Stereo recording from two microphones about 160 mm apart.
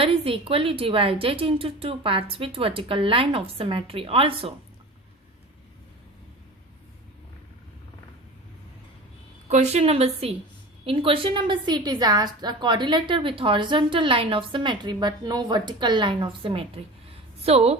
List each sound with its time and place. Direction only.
0.0 s a woman's voice: 35° right (ahead or behind)
9.5 s a woman's voice: 45° right (ahead or behind)